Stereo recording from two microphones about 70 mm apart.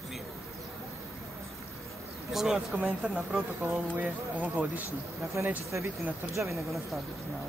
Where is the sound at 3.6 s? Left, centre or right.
Right.